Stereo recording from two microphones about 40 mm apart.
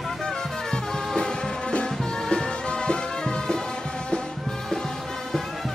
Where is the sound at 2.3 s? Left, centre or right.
Left.